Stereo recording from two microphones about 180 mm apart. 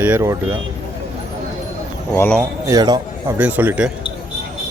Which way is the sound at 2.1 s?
10° left (ahead or behind).